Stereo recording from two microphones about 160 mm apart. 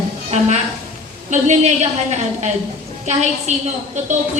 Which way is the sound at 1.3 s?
45° right (ahead or behind).